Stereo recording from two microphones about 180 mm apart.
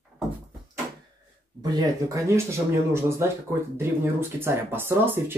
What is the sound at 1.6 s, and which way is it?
Speech, 20° right (ahead or behind).